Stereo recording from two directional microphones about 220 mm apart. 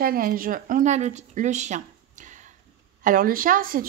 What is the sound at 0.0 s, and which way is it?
Speech, 40° right (ahead or behind).